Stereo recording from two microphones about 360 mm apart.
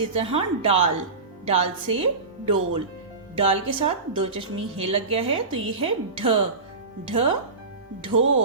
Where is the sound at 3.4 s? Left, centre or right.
Centre.